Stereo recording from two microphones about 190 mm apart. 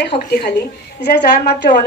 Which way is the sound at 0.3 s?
50° left (ahead or behind).